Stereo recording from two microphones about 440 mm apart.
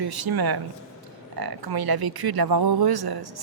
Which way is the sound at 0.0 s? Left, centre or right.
Right.